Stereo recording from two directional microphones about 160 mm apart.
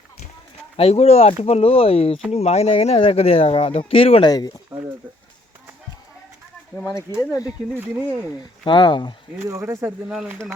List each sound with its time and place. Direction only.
0.8 s speech: 40° left (ahead or behind); by 4.5 s 25° left (ahead or behind)
7.1 s speech: 20° left (ahead or behind)
7.4 s speech: 15° right (ahead or behind)
8.6 s speech: 30° left (ahead or behind)
9.5 s speech: 15° right (ahead or behind)
10.1 s speech: 5° right (ahead or behind)